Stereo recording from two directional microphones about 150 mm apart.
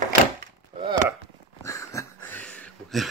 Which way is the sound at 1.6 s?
20° left (ahead or behind).